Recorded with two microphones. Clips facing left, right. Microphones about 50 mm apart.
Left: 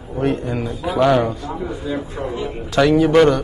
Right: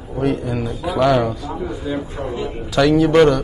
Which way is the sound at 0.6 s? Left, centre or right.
Left.